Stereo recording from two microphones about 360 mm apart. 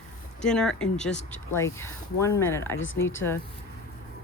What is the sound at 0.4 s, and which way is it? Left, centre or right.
Speech, centre.